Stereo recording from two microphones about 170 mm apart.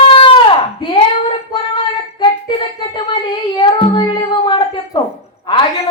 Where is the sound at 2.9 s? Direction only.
25° left (ahead or behind).